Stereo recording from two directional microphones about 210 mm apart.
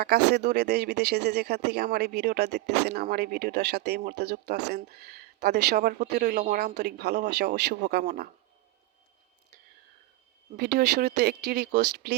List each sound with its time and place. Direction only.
0.0 s speech: 50° right (ahead or behind)
10.6 s speech: 50° right (ahead or behind)